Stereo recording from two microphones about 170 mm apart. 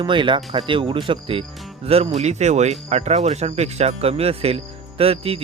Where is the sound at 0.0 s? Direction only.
30° right (ahead or behind).